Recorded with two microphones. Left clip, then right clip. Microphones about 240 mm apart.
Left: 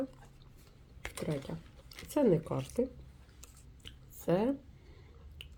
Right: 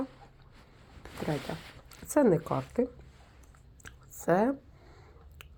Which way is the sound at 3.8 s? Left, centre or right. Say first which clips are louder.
Right 4 dB; right.